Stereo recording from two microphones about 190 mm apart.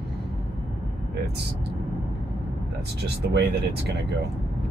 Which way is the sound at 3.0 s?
60° right (ahead or behind).